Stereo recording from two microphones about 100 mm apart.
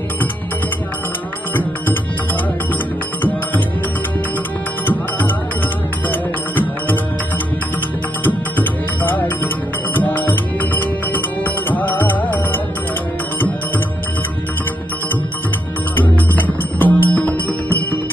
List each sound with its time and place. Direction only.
1.5 s music: 20° left (ahead or behind)
3.2 s music: 20° left (ahead or behind)
8.2 s music: 20° left (ahead or behind)
16.0 s music: 20° left (ahead or behind)